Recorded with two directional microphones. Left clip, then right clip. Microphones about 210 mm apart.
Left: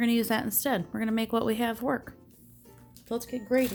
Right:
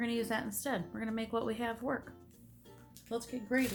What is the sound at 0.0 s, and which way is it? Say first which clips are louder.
Speech: left 8 dB; 50° left (ahead or behind).